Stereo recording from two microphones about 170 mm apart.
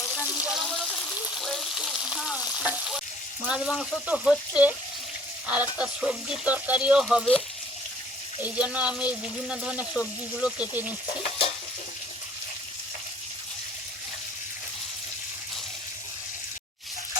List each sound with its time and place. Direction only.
0.1 s water: 20° left (ahead or behind)
0.4 s a sound: centre (ahead or behind)
1.4 s speech: centre (ahead or behind)
3.4 s speech: centre (ahead or behind)
5.8 s speech: 5° right (ahead or behind)
11.0 s stir: 35° left (ahead or behind)